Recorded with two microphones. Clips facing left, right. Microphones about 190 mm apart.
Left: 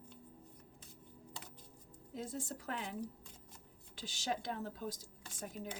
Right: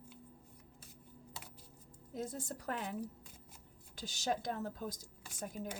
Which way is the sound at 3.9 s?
45° right (ahead or behind).